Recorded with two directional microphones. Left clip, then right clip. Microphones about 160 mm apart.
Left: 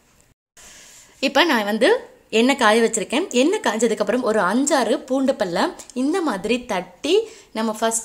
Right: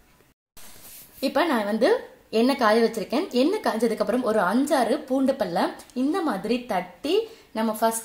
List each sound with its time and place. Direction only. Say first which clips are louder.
1.2 s a woman's voice: left 5 dB; 5° left (ahead or behind)